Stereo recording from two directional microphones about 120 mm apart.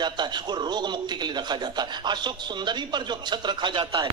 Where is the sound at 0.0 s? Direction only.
40° right (ahead or behind).